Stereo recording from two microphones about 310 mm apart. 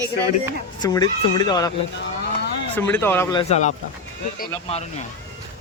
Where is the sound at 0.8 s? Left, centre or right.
Centre.